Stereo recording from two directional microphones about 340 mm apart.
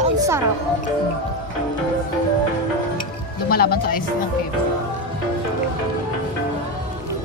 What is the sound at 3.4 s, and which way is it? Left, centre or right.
Music, left.